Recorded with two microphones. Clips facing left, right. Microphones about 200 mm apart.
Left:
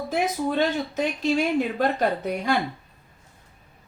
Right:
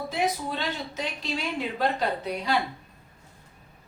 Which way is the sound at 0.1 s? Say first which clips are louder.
Left 5 dB; 50° left (ahead or behind).